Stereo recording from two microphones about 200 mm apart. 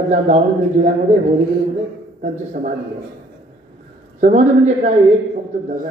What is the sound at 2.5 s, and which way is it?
Speech, 40° right (ahead or behind).